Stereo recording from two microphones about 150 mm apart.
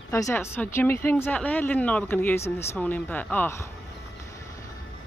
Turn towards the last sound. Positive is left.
turn(degrees=15)  # may be behind; listen again after turning